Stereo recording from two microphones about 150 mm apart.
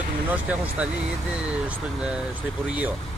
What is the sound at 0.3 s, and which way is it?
Speech, 10° right (ahead or behind).